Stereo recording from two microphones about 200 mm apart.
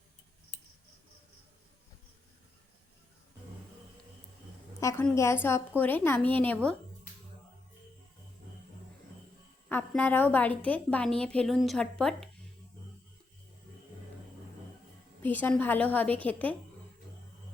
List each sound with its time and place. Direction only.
4.8 s a woman's voice: 15° left (ahead or behind)
9.6 s a woman's voice: 10° left (ahead or behind)
15.2 s a woman's voice: 10° left (ahead or behind)